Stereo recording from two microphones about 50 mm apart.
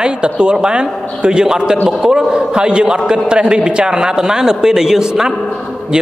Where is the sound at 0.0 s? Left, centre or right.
Centre.